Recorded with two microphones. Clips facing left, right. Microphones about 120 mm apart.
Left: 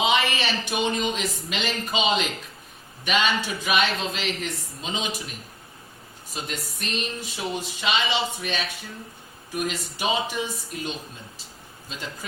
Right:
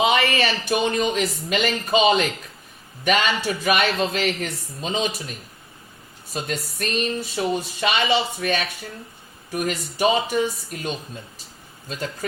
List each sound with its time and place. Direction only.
0.0 s speech: 45° right (ahead or behind)
6.3 s speech: 45° right (ahead or behind)